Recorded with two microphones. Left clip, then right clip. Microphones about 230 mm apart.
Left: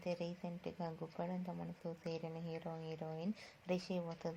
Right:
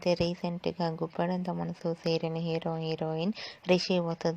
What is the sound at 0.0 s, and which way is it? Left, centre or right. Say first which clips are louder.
A woman's voice: right 15 dB; right.